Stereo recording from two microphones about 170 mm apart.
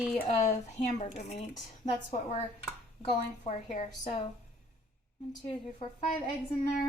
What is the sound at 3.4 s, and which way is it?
Speech, 40° left (ahead or behind).